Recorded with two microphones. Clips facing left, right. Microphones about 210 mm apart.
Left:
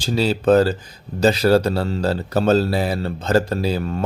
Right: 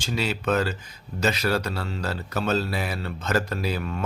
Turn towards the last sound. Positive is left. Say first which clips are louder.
# left 6 dB
turn(degrees=35)  # may be behind; listen again after turning